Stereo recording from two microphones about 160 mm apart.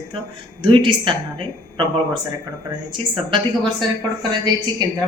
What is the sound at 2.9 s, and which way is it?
Speech, 30° right (ahead or behind).